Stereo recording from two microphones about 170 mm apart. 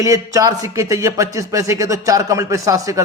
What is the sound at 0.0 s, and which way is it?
Speech, 20° right (ahead or behind).